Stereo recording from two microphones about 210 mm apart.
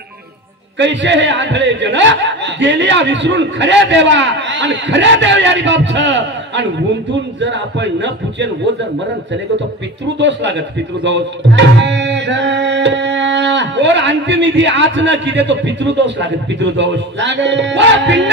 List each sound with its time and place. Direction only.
0.7 s speech: 60° right (ahead or behind)
10.1 s speech: 55° right (ahead or behind)